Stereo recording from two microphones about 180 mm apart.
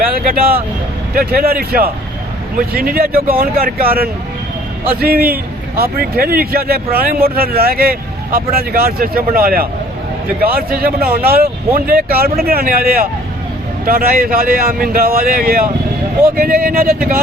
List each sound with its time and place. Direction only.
0.0 s a man's voice: 55° right (ahead or behind)
10.7 s a man's voice: 55° right (ahead or behind)